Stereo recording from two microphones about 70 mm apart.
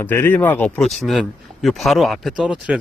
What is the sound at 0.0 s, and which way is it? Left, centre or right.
Speech, left.